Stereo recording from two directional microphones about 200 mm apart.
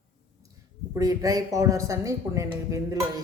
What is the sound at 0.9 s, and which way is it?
Speech, 15° right (ahead or behind).